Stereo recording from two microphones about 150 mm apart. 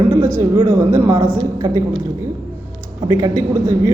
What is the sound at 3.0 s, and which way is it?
Speech, 25° right (ahead or behind).